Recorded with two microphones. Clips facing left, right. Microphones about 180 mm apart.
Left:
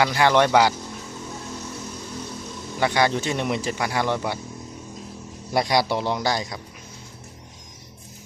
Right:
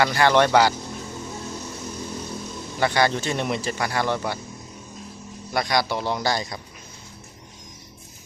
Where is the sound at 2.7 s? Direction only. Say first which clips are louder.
Even; 10° left (ahead or behind).